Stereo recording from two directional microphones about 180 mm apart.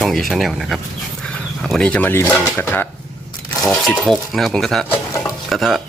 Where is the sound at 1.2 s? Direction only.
5° left (ahead or behind).